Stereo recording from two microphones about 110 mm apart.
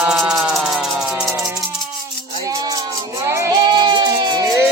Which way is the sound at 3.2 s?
25° right (ahead or behind).